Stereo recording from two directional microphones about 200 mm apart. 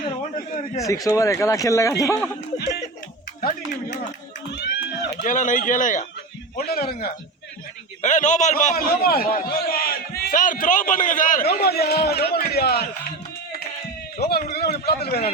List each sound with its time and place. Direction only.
0.3 s a sound: 40° left (ahead or behind)
0.8 s a man's voice: 15° left (ahead or behind)
2.6 s a sound: 55° left (ahead or behind)
5.2 s a man's voice: 40° left (ahead or behind)
8.0 s a man's voice: 40° left (ahead or behind)
14.2 s a man's voice: 50° left (ahead or behind)